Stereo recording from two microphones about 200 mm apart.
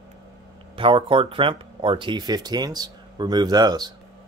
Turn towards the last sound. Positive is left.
turn(degrees=-20)  # may be behind; listen again after turning